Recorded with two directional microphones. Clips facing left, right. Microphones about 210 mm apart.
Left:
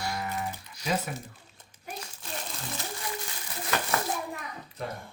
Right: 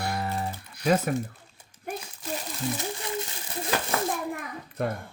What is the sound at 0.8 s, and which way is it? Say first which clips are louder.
Speech: right 7 dB; 55° right (ahead or behind).